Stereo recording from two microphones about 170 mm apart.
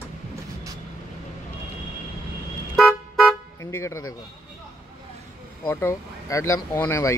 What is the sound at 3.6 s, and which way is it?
Speech, 15° left (ahead or behind).